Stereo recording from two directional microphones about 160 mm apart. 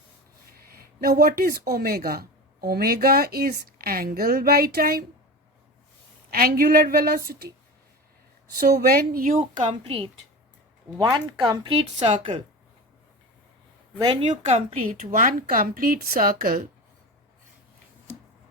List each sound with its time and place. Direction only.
0.5 s speech: 70° right (ahead or behind)
6.3 s a woman's voice: 70° right (ahead or behind)
8.5 s a woman's voice: 70° right (ahead or behind)
9.4 s a woman's voice: 35° right (ahead or behind)
14.0 s a woman's voice: 30° right (ahead or behind)
14.4 s a woman's voice: 45° right (ahead or behind)
14.8 s speech: 60° right (ahead or behind)